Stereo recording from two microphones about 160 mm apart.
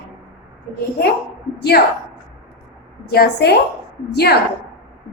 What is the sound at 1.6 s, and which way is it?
Speech, 90° left.